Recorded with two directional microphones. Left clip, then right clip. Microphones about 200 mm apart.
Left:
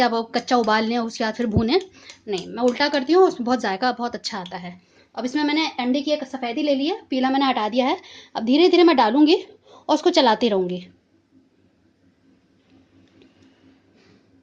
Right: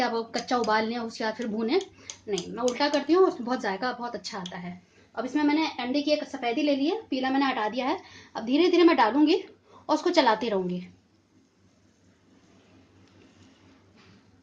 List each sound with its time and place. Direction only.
0.0 s a woman's voice: 45° left (ahead or behind)